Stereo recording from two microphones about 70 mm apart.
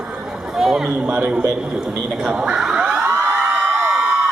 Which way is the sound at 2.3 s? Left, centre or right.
Centre.